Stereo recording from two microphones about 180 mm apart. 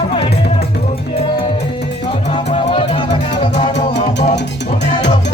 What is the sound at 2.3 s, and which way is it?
Music, 30° left (ahead or behind).